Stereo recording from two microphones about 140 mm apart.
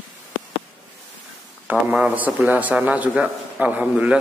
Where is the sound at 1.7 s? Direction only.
10° right (ahead or behind).